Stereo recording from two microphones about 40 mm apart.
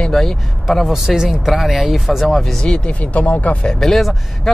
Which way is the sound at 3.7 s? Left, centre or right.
Centre.